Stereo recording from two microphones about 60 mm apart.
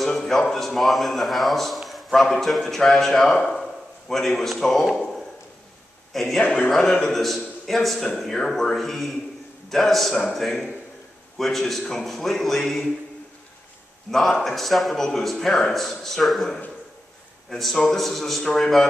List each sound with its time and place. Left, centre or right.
0.0 s a man's voice: centre
6.4 s music: centre
6.7 s a man's voice: centre
14.1 s a man's voice: centre